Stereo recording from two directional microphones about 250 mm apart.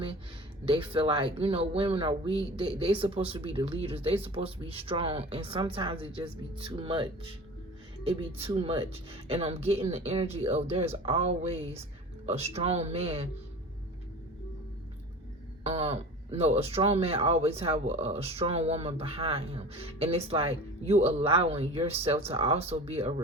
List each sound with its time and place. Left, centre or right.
0.6 s speech: centre
15.6 s speech: right